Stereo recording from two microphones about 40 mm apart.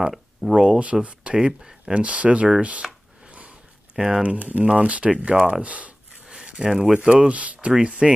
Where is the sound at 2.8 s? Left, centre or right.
Centre.